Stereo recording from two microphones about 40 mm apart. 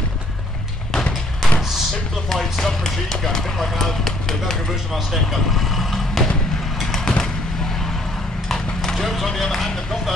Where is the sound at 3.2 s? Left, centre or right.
Centre.